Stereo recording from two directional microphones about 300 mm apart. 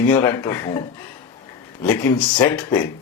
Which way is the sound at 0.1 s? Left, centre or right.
Centre.